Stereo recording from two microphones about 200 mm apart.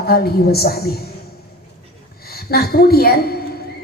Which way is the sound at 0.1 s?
50° left (ahead or behind).